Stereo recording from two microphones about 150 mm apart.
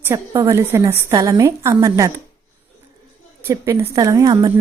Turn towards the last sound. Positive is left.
turn(degrees=-25)  # may be behind; listen again after turning